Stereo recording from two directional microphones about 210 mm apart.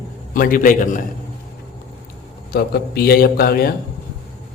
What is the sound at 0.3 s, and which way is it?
Speech, 40° left (ahead or behind).